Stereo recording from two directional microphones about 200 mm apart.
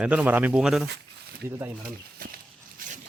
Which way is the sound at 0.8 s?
55° right (ahead or behind).